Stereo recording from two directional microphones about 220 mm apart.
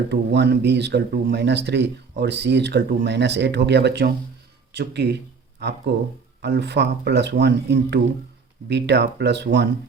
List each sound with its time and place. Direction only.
0.1 s speech: 50° right (ahead or behind)